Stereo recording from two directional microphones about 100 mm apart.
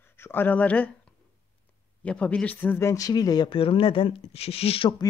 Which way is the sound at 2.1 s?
10° left (ahead or behind).